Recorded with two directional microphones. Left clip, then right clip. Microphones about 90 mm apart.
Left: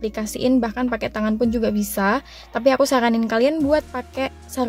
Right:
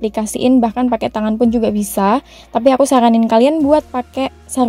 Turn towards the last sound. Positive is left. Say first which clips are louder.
# right 6 dB
turn(degrees=-55)  # may be behind; listen again after turning